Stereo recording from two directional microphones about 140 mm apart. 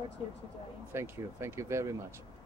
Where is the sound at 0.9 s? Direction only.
20° right (ahead or behind).